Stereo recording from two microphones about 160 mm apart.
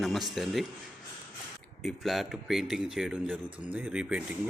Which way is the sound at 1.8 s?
Centre (ahead or behind).